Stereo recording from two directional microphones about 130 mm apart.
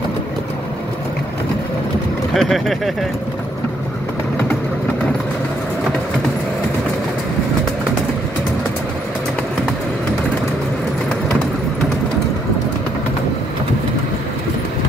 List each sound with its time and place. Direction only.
2.3 s speech: centre (ahead or behind)